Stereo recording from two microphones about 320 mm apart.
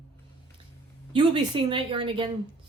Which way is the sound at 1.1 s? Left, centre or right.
Centre.